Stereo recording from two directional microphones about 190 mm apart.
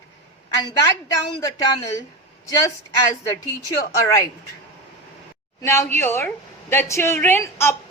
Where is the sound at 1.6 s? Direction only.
20° left (ahead or behind).